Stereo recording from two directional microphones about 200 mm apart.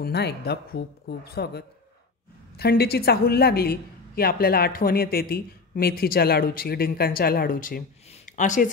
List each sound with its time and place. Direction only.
0.0 s speech: 55° left (ahead or behind); by 8.6 s 40° left (ahead or behind)